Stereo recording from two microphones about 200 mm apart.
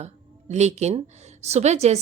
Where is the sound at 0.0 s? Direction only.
35° right (ahead or behind).